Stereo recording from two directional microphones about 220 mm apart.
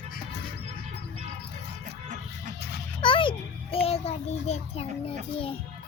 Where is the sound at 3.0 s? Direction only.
25° left (ahead or behind).